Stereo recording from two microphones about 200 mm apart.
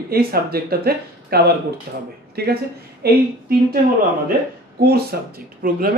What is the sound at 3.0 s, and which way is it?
Speech, 50° right (ahead or behind).